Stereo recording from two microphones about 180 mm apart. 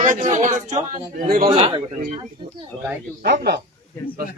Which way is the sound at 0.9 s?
50° right (ahead or behind).